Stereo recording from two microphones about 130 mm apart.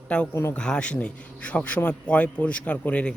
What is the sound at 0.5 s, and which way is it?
Speech, 5° left (ahead or behind).